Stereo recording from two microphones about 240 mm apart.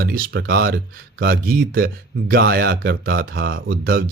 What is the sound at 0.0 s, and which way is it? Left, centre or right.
Speech, right.